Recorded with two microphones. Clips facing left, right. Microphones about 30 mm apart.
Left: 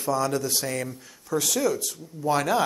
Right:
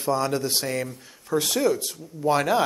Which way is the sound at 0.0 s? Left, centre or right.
Right.